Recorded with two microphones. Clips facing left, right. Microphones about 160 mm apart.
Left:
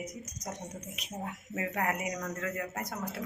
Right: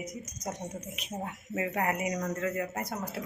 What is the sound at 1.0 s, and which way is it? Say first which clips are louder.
Speech: even; centre (ahead or behind).